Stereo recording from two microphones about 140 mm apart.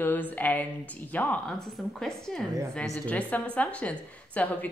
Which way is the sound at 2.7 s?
10° left (ahead or behind).